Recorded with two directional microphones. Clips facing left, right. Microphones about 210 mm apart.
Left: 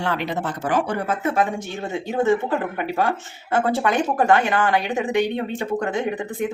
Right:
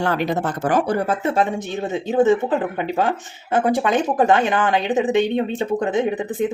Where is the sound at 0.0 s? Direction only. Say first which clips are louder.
Right 4 dB; 45° right (ahead or behind).